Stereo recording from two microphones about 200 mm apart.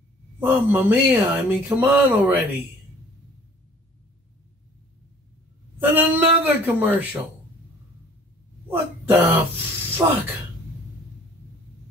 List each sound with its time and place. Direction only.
0.4 s speech: 10° right (ahead or behind)
5.8 s speech: 10° right (ahead or behind)
8.6 s a sound: 10° right (ahead or behind)
10.0 s speech: 15° right (ahead or behind)